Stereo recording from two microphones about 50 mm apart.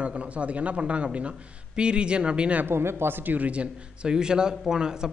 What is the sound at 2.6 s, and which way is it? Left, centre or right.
Speech, right.